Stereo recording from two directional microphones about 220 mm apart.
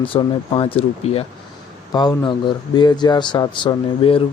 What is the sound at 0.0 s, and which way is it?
Speech, 25° left (ahead or behind).